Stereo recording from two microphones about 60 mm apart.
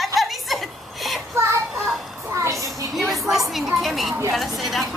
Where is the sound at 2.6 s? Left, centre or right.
Right.